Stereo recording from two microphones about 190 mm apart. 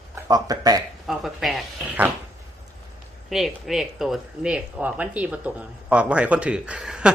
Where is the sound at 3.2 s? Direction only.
Centre (ahead or behind).